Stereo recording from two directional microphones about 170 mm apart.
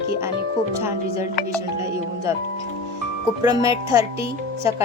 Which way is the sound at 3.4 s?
20° right (ahead or behind).